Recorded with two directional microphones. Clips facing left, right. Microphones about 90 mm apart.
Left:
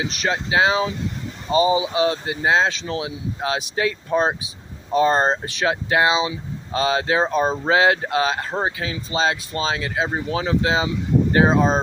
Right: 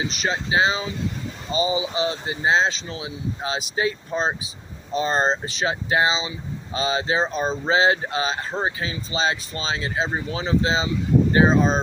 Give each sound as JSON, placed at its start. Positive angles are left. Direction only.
{"t": 0.0, "sound": "speech", "side_deg": 60}